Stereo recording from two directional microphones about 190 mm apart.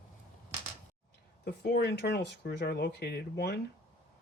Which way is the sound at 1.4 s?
60° left (ahead or behind).